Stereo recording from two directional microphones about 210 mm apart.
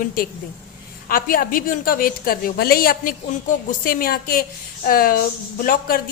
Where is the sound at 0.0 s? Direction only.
45° left (ahead or behind).